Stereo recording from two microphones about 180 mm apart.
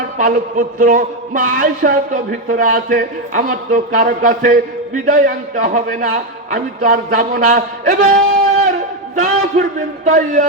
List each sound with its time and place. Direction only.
0.2 s a man's voice: 50° right (ahead or behind)